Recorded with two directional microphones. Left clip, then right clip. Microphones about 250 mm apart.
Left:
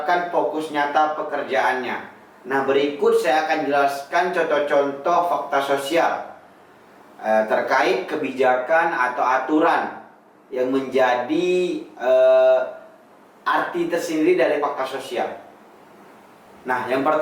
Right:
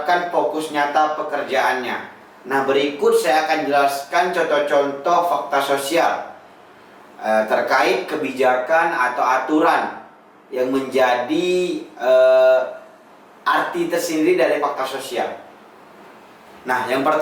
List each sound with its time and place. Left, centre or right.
0.1 s speech: centre
2.5 s music: centre
6.0 s speech: centre
10.5 s music: centre
13.5 s speech: centre
16.6 s music: centre